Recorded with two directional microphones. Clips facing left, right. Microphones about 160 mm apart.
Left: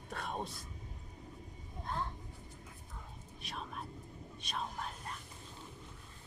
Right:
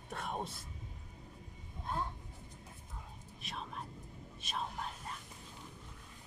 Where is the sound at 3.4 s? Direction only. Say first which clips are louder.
Even; centre (ahead or behind).